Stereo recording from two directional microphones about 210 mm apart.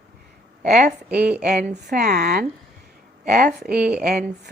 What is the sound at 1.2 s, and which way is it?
Speech, 5° right (ahead or behind).